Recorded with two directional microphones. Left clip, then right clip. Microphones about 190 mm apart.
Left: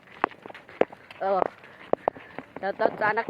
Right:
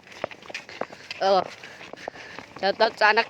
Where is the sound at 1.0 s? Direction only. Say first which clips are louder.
Right 4 dB; 20° right (ahead or behind).